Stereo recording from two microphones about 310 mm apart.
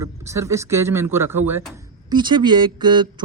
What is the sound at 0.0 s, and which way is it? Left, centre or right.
Speech, centre.